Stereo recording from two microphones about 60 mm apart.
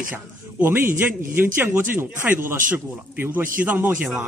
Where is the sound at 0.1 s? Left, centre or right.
Right.